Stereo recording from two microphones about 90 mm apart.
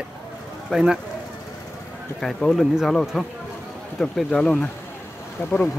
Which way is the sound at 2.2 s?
5° left (ahead or behind).